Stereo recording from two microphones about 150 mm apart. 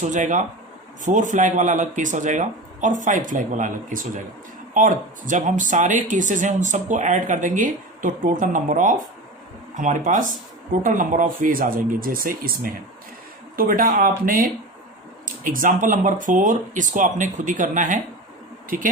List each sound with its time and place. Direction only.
0.0 s speech: 55° right (ahead or behind)